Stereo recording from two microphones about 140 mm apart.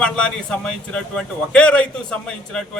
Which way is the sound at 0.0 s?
5° left (ahead or behind).